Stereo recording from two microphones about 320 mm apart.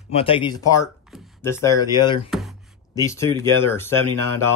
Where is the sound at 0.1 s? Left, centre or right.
Centre.